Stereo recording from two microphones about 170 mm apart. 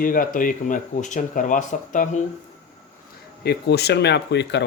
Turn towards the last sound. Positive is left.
turn(degrees=85)